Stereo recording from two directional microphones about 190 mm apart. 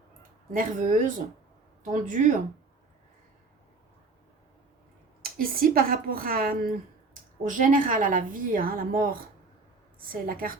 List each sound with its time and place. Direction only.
0.5 s a woman's voice: 45° right (ahead or behind)
5.2 s a woman's voice: 50° right (ahead or behind)